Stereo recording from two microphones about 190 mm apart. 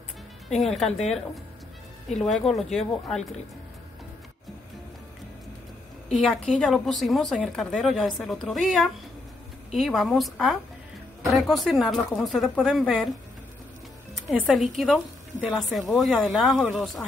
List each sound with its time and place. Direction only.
0.5 s a woman's voice: centre (ahead or behind)
6.1 s a woman's voice: centre (ahead or behind)
14.4 s a woman's voice: centre (ahead or behind)